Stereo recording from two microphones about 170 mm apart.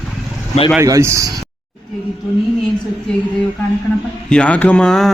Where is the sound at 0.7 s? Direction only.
20° right (ahead or behind).